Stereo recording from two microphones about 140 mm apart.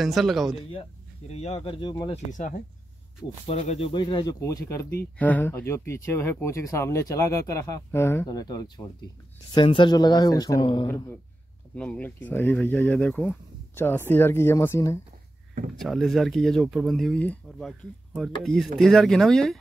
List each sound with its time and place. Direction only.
0.0 s speech: centre (ahead or behind)
1.3 s speech: 50° left (ahead or behind); by 2.1 s 30° left (ahead or behind)
2.3 s speech: 65° left (ahead or behind)
3.4 s speech: 50° left (ahead or behind)
3.9 s speech: 35° left (ahead or behind)
11.7 s speech: 10° left (ahead or behind)
15.8 s speech: centre (ahead or behind)